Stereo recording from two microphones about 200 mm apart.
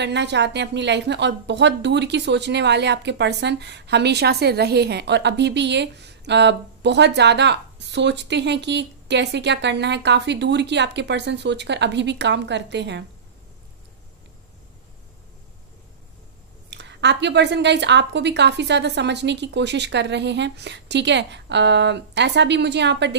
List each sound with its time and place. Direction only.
0.0 s a woman's voice: 60° right (ahead or behind)
16.7 s a woman's voice: 60° right (ahead or behind)